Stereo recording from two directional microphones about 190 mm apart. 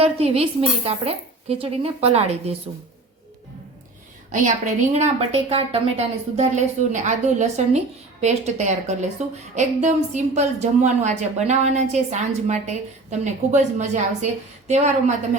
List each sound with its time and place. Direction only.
0.0 s a woman's voice: 30° right (ahead or behind)
4.3 s a woman's voice: 40° right (ahead or behind)